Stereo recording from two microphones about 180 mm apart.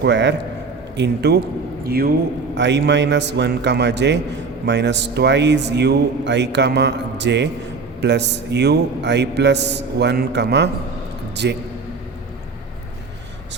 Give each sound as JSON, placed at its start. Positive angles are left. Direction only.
{"t": 0.0, "sound": "a man's voice", "side_deg": -80}
{"t": 2.6, "sound": "a man's voice", "side_deg": -75}